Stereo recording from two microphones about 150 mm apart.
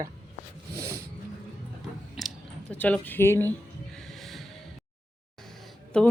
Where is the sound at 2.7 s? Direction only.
10° left (ahead or behind).